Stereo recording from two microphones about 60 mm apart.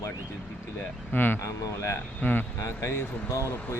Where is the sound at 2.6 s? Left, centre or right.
Left.